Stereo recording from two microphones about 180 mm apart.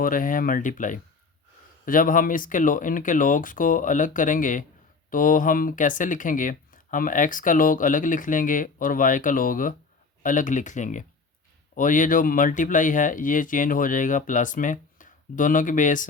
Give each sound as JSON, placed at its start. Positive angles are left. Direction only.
{"t": 0.0, "sound": "speech", "side_deg": 50}